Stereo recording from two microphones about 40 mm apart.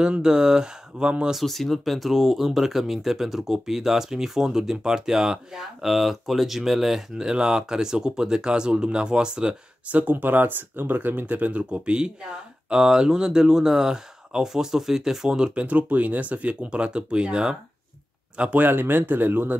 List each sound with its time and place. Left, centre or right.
0.0 s speech: right
1.4 s speech: centre
7.2 s speech: centre
9.8 s speech: right; by 15.5 s centre
15.5 s speech: right
18.6 s speech: right